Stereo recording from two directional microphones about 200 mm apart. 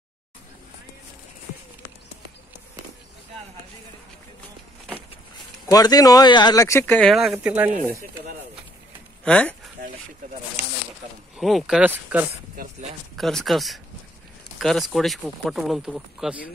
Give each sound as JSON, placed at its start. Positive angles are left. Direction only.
{"t": 5.7, "sound": "speech", "side_deg": 20}
{"t": 9.2, "sound": "speech", "side_deg": 5}
{"t": 11.3, "sound": "speech", "side_deg": 0}